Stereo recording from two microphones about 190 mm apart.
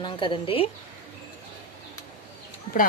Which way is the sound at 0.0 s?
25° left (ahead or behind).